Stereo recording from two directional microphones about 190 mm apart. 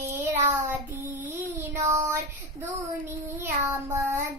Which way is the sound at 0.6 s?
15° right (ahead or behind).